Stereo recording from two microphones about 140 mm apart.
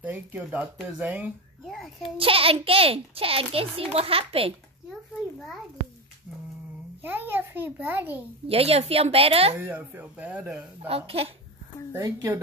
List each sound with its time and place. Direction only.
0.0 s a child's voice: 10° right (ahead or behind)
2.1 s a child's voice: 40° right (ahead or behind)
7.0 s a child's voice: 15° right (ahead or behind)
8.5 s a child's voice: 45° right (ahead or behind)
9.6 s a child's voice: 10° right (ahead or behind)
10.8 s a child's voice: 45° right (ahead or behind)
11.9 s a woman's voice: 25° right (ahead or behind)